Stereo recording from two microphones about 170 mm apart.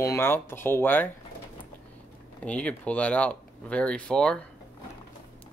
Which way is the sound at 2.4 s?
5° left (ahead or behind).